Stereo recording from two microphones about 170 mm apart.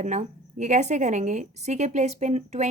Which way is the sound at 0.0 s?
45° right (ahead or behind).